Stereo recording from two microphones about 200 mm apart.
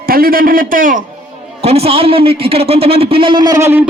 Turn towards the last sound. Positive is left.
turn(degrees=-10)  # may be behind; listen again after turning